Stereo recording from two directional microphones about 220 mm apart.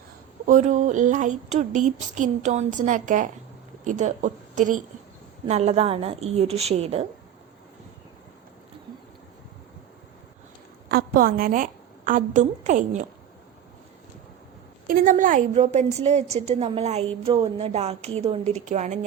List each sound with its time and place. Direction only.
0.4 s a woman's voice: 35° right (ahead or behind)
10.8 s a woman's voice: 45° right (ahead or behind)
14.8 s a woman's voice: 40° right (ahead or behind)